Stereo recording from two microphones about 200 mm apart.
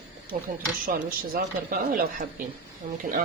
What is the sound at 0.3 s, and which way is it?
Speech, 45° right (ahead or behind).